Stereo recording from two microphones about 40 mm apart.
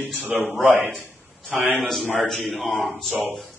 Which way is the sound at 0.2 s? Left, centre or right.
Right.